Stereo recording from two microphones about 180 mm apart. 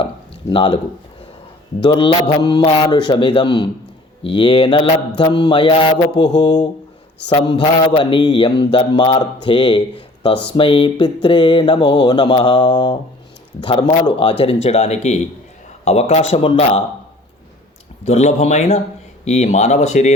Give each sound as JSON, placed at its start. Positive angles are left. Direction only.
{"t": 0.5, "sound": "mantra", "side_deg": 30}
{"t": 1.8, "sound": "mantra", "side_deg": 30}
{"t": 14.0, "sound": "a man's voice", "side_deg": 30}
{"t": 18.0, "sound": "speech", "side_deg": 40}